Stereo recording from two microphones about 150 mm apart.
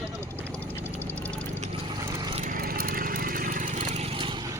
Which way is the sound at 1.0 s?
10° left (ahead or behind).